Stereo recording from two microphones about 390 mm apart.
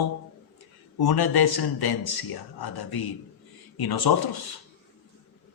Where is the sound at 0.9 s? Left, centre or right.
Left.